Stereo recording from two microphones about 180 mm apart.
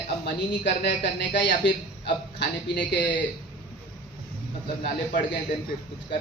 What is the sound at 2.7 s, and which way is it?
Speech, 75° left (ahead or behind).